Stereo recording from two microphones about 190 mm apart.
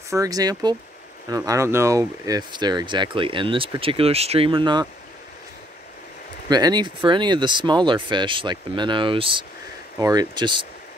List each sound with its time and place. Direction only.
0.1 s speech: 20° right (ahead or behind)
6.5 s speech: 20° right (ahead or behind)